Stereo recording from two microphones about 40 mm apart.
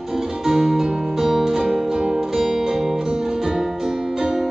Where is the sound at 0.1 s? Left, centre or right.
Centre.